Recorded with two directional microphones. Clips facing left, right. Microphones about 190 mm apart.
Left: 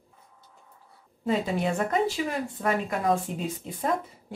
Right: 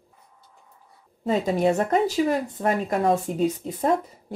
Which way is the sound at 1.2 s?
40° right (ahead or behind).